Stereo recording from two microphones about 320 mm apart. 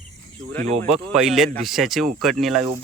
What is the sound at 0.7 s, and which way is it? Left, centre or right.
Speech, right.